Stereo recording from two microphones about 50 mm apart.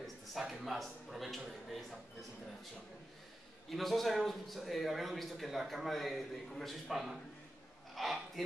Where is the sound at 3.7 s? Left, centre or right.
Centre.